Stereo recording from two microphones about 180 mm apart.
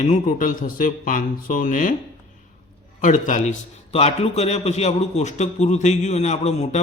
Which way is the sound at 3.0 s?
45° left (ahead or behind).